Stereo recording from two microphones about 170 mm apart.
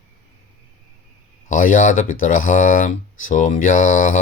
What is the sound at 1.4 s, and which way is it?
Speech, 50° left (ahead or behind).